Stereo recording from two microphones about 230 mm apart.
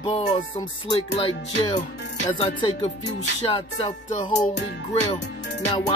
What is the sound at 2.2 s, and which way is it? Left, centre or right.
Speech, centre.